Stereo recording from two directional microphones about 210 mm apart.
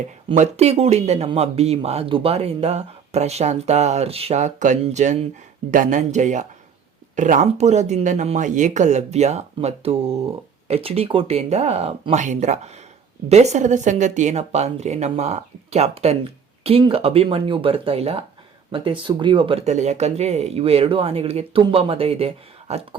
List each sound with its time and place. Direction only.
0.3 s speech: 30° right (ahead or behind)